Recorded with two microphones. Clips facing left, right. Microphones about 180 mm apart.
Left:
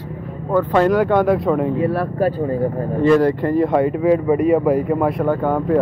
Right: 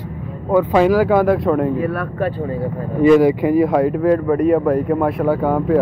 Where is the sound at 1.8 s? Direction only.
30° left (ahead or behind).